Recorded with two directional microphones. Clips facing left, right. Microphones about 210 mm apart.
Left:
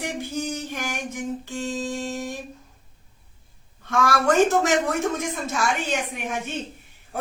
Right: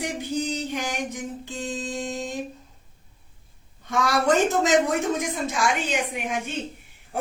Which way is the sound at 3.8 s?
15° right (ahead or behind).